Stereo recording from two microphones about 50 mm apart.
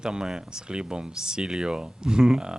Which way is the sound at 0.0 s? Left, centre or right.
Centre.